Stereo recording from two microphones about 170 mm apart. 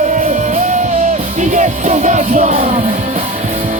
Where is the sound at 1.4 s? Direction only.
45° right (ahead or behind).